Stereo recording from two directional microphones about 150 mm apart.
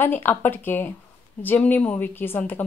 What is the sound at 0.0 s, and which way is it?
Speech, 15° left (ahead or behind).